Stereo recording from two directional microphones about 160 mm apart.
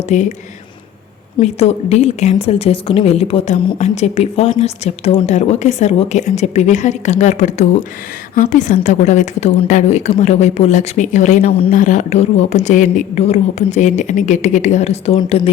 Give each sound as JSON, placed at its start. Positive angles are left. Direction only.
{"t": 0.1, "sound": "a woman's voice", "side_deg": 45}
{"t": 1.4, "sound": "a woman's voice", "side_deg": 40}
{"t": 11.7, "sound": "a woman's voice", "side_deg": 50}